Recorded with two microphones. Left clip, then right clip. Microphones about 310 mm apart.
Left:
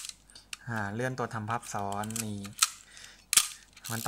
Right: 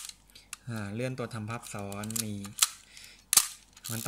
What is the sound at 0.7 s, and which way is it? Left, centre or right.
Speech, centre.